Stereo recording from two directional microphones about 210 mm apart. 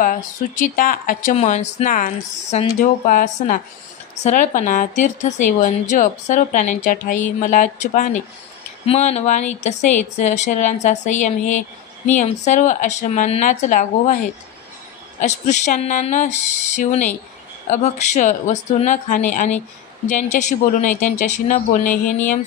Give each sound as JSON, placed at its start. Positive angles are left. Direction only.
{"t": 0.0, "sound": "a woman's voice", "side_deg": 40}
{"t": 15.1, "sound": "a woman's voice", "side_deg": 35}